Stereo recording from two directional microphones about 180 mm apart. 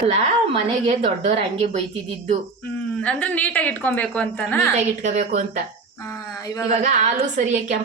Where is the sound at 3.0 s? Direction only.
5° left (ahead or behind).